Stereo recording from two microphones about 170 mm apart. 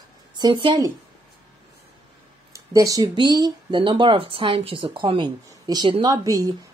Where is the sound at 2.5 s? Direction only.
20° right (ahead or behind).